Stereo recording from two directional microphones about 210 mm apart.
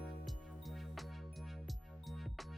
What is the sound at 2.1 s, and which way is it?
Music, centre (ahead or behind).